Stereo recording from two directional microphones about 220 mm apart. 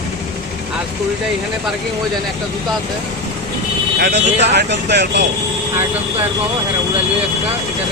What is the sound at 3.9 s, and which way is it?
Speech, 50° right (ahead or behind).